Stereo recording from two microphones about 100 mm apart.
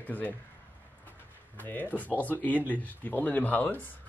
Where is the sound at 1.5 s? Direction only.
20° left (ahead or behind).